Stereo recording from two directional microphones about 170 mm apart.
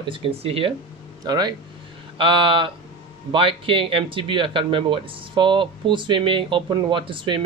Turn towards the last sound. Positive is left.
turn(degrees=-30)  # may be behind; listen again after turning